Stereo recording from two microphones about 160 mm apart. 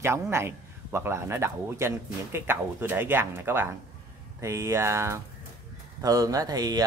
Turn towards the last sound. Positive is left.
turn(degrees=-25)  # may be behind; listen again after turning